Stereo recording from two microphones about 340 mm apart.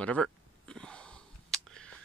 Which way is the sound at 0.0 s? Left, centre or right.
Centre.